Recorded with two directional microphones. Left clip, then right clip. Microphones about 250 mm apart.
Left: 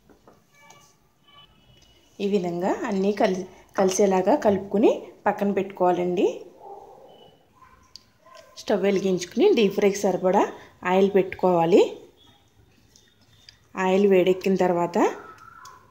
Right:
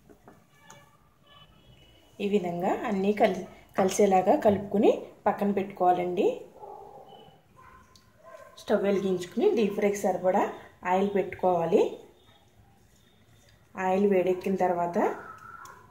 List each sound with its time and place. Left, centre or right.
2.1 s a woman's voice: left
8.5 s speech: left
13.7 s speech: left